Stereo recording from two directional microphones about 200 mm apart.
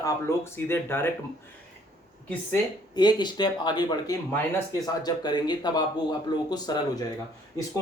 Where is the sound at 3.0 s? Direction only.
20° left (ahead or behind).